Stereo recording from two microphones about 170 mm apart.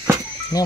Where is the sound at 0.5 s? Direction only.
20° left (ahead or behind).